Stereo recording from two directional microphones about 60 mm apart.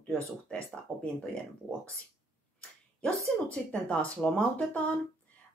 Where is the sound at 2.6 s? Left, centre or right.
Left.